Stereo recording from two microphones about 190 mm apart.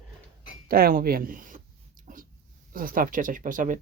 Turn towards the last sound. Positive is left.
turn(degrees=-45)  # may be behind; listen again after turning